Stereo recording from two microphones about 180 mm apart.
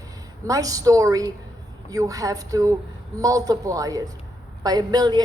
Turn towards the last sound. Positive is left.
turn(degrees=-20)  # may be behind; listen again after turning